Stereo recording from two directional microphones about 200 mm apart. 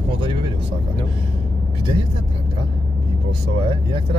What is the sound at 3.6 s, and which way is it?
Speech, 25° right (ahead or behind).